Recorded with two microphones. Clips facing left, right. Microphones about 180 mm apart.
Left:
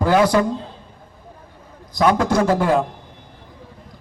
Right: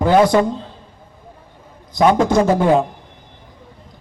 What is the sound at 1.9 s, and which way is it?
Speech, 20° right (ahead or behind).